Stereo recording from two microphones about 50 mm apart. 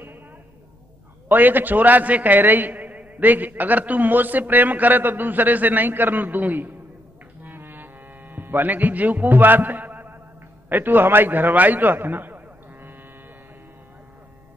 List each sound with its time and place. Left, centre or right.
1.3 s a man's voice: right
7.4 s music: right
10.7 s a man's voice: right